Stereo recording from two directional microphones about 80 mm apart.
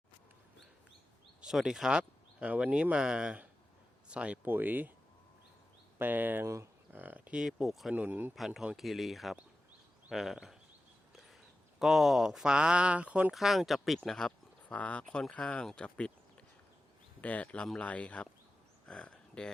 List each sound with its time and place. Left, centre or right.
1.4 s speech: centre
4.4 s speech: right
6.0 s speech: right
7.3 s speech: centre
7.9 s speech: right
8.4 s speech: centre
11.8 s speech: centre
13.3 s speech: centre
17.2 s speech: centre
18.9 s a sound: centre